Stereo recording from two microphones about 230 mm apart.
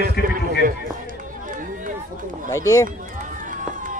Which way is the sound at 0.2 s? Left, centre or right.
Left.